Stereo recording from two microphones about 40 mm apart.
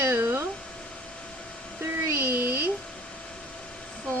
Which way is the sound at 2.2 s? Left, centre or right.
Right.